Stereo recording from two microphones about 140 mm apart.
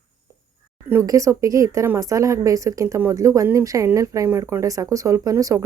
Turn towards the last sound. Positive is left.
turn(degrees=-20)  # may be behind; listen again after turning